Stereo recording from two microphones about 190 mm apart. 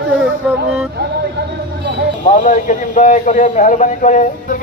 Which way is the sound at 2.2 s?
40° left (ahead or behind).